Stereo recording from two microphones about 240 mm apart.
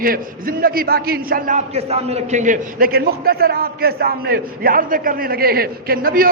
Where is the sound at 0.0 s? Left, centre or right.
Right.